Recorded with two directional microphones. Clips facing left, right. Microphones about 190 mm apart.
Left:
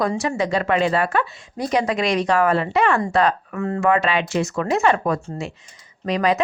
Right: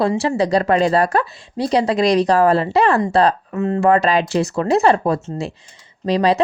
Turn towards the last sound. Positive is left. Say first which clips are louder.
# right 4 dB
turn(degrees=-35)  # may be behind; listen again after turning